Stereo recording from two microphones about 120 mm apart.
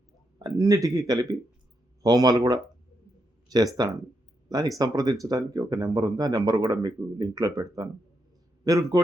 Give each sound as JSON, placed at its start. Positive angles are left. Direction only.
{"t": 0.3, "sound": "a man's voice", "side_deg": -30}